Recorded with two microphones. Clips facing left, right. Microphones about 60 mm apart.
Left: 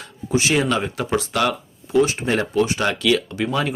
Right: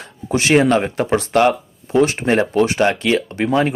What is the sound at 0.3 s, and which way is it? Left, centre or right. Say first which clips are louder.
Speech: right 5 dB; right.